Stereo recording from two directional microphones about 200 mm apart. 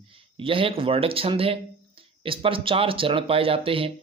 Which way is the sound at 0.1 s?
25° right (ahead or behind).